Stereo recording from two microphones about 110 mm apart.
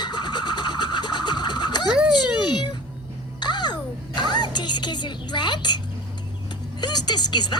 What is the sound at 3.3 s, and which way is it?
Music, 40° left (ahead or behind).